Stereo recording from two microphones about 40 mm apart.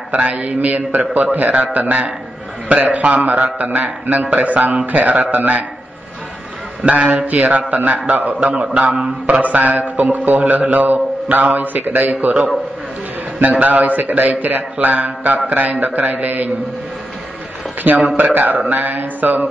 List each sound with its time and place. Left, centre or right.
0.1 s a man's voice: right
6.8 s a man's voice: right
8.9 s mantra: centre
9.3 s a man's voice: right
10.4 s a man's voice: right
10.7 s a man's voice: right
13.4 s a man's voice: right
17.9 s a man's voice: right